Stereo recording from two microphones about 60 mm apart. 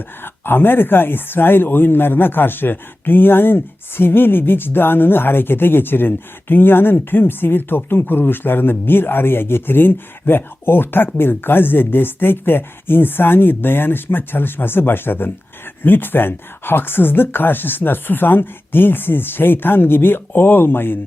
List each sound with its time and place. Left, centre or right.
0.2 s speech: left